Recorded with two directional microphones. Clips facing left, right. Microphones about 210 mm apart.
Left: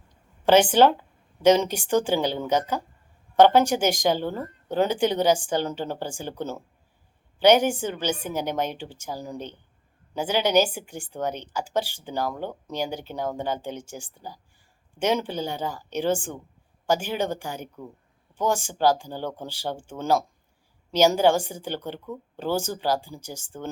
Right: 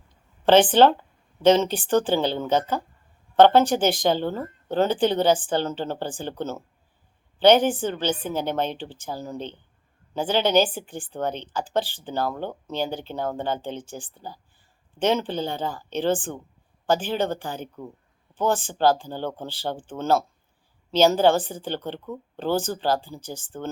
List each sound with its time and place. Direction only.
0.4 s speech: 10° left (ahead or behind)